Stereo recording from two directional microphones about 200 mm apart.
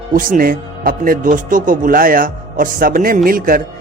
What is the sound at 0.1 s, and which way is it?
Speech, 45° right (ahead or behind).